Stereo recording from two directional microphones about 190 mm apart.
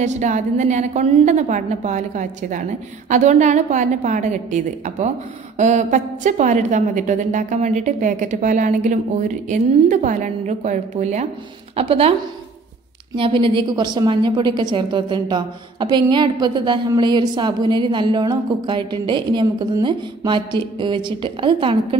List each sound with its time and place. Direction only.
0.0 s a woman's voice: 40° right (ahead or behind)